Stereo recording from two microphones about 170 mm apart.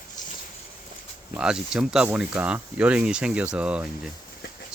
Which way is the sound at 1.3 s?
5° right (ahead or behind).